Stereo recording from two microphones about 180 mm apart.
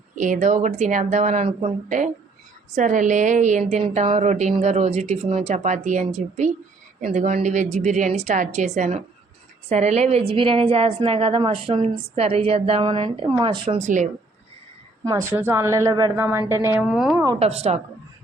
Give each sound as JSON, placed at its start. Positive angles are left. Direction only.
{"t": 0.2, "sound": "a woman's voice", "side_deg": -45}
{"t": 15.0, "sound": "a woman's voice", "side_deg": -15}
{"t": 16.7, "sound": "a woman's voice", "side_deg": -5}
{"t": 17.4, "sound": "a woman's voice", "side_deg": -35}